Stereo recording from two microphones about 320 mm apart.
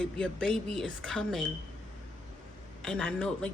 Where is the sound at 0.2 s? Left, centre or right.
Centre.